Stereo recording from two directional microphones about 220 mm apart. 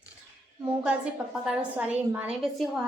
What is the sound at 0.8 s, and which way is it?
A woman's voice, 5° right (ahead or behind).